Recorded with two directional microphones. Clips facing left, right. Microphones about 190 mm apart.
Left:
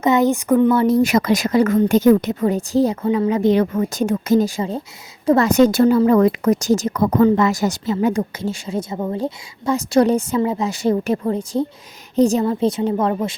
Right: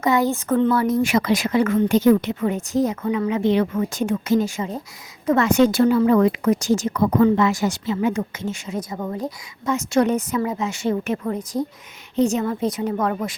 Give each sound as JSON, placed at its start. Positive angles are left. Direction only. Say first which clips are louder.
{"t": 0.0, "sound": "speech", "louder": "left 4 dB", "side_deg": 20}
{"t": 0.7, "sound": "a woman's voice", "louder": "left 4 dB", "side_deg": 30}